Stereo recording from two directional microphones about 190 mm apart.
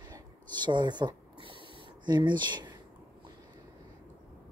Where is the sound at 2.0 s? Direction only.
25° right (ahead or behind).